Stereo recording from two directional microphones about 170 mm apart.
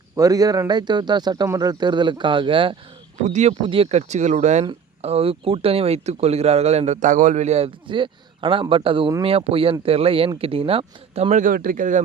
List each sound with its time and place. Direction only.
0.2 s speech: 20° right (ahead or behind)
3.2 s speech: 45° right (ahead or behind)
11.4 s speech: 55° right (ahead or behind)